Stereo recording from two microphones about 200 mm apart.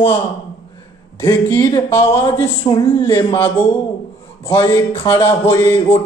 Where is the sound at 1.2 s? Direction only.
15° left (ahead or behind).